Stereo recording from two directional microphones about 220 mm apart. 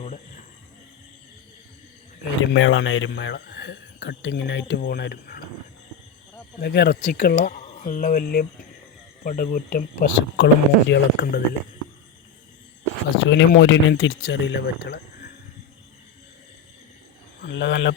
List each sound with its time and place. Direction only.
2.4 s speech: 60° left (ahead or behind); by 5.4 s 45° left (ahead or behind)
6.6 s speech: 45° left (ahead or behind)
13.2 s speech: 55° left (ahead or behind)
17.4 s speech: 55° left (ahead or behind)